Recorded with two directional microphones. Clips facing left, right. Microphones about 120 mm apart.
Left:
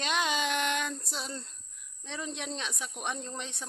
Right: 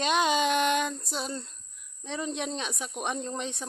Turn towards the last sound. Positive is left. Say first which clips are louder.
# right 6 dB
turn(degrees=-15)  # may be behind; listen again after turning